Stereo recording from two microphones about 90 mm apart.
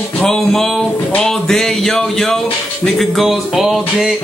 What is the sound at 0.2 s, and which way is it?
Music, 5° left (ahead or behind).